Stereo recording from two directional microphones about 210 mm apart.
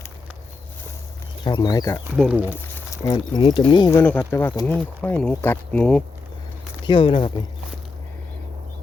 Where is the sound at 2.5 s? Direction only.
10° left (ahead or behind).